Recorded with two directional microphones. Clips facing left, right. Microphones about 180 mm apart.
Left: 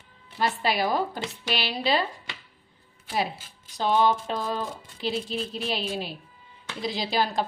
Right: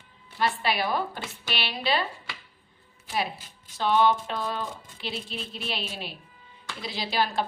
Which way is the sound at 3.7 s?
40° left (ahead or behind).